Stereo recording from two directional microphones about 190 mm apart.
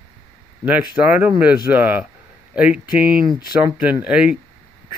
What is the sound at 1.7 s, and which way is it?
Speech, 10° right (ahead or behind).